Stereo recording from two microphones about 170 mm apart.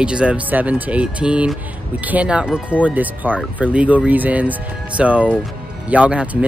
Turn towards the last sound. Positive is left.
turn(degrees=-5)  # may be behind; listen again after turning